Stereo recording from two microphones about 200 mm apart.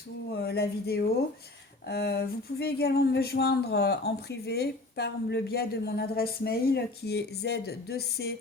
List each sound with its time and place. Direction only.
0.3 s speech: 55° left (ahead or behind)